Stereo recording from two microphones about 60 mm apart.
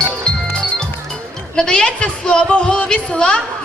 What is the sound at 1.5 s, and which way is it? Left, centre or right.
Speech, centre.